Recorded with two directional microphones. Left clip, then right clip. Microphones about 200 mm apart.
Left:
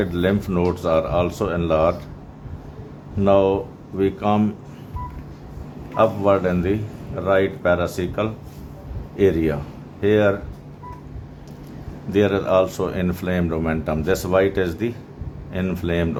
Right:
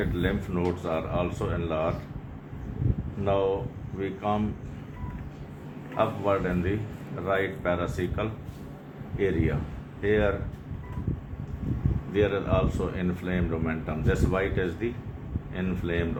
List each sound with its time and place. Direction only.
0.0 s speech: 50° left (ahead or behind)
3.2 s speech: 50° left (ahead or behind)
6.0 s speech: 50° left (ahead or behind)
12.1 s speech: 55° left (ahead or behind)